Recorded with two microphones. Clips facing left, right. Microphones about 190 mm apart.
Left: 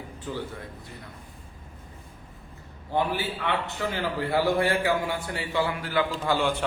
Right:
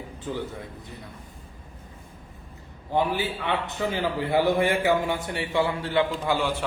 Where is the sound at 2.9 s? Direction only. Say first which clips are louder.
Right 2 dB; 15° right (ahead or behind).